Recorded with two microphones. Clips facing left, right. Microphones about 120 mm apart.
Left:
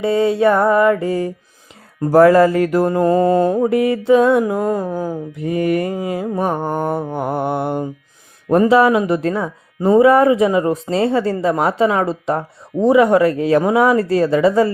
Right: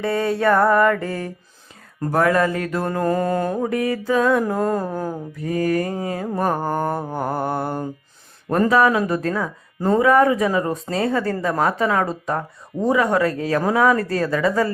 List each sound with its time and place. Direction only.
0.0 s mantra: 15° left (ahead or behind)
2.0 s mantra: 30° left (ahead or behind)
4.4 s mantra: 10° left (ahead or behind)
5.4 s mantra: 20° left (ahead or behind)